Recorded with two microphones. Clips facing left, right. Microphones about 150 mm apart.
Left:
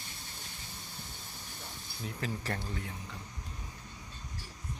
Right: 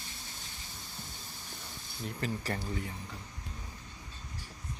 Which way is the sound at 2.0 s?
Centre (ahead or behind).